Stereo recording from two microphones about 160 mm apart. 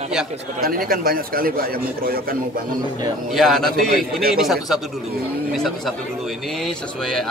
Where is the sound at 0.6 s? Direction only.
65° right (ahead or behind).